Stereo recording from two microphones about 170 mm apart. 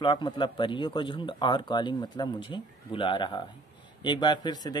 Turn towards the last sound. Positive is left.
turn(degrees=25)  # may be behind; listen again after turning